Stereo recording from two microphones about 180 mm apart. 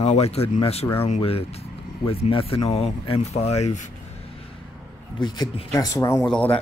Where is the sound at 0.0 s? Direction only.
35° left (ahead or behind).